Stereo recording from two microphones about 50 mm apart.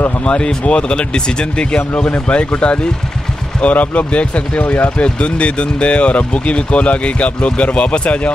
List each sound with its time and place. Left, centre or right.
0.2 s speech: centre
1.8 s speech: left
2.2 s speech: left